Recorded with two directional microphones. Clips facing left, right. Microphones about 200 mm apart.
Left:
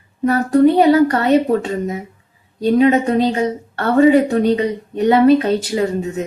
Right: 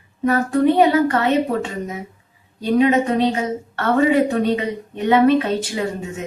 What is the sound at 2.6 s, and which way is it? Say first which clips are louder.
A woman's voice: left 3 dB; 35° left (ahead or behind).